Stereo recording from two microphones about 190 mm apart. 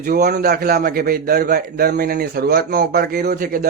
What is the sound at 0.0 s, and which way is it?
A man's voice, 50° right (ahead or behind).